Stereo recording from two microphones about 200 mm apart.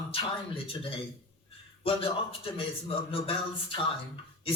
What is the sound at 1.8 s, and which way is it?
Speech, 25° left (ahead or behind).